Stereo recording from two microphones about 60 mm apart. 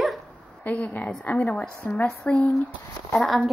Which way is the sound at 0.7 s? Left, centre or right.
Left.